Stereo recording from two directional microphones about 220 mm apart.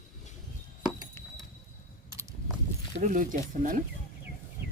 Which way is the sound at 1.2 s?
10° left (ahead or behind).